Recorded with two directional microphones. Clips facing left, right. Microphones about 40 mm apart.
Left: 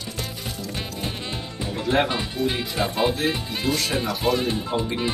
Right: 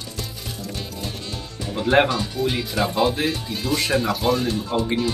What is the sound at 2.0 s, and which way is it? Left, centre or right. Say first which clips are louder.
Speech: right 2 dB; left.